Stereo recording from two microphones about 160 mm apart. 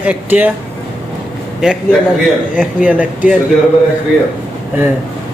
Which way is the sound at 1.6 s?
5° right (ahead or behind).